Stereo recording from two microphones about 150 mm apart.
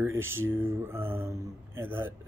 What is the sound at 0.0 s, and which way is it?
Speech, 15° right (ahead or behind).